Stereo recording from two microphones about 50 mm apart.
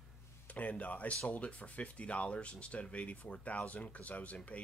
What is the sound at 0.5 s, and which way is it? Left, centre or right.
Speech, left.